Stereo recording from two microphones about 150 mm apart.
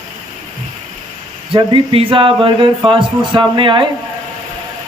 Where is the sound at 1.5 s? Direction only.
35° right (ahead or behind).